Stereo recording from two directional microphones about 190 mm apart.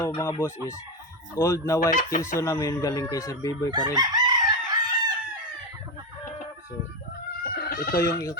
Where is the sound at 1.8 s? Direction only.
45° left (ahead or behind).